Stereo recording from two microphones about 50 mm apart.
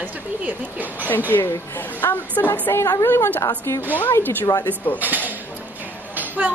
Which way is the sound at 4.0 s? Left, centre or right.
Left.